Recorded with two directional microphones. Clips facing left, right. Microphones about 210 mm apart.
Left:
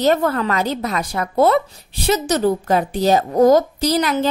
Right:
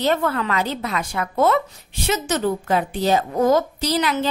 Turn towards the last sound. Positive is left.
turn(degrees=45)  # may be behind; listen again after turning